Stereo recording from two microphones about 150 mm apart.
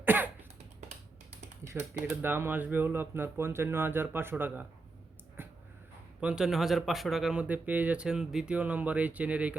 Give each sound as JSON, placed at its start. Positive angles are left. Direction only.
{"t": 0.0, "sound": "cough", "side_deg": -10}
{"t": 1.6, "sound": "typewriter", "side_deg": -15}
{"t": 2.2, "sound": "speech", "side_deg": -15}
{"t": 5.4, "sound": "a sound", "side_deg": -15}
{"t": 6.1, "sound": "speech", "side_deg": -5}